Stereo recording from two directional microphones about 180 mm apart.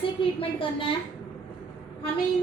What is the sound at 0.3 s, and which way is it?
Speech, 30° left (ahead or behind).